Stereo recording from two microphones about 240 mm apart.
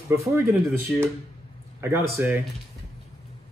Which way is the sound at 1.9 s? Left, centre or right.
Centre.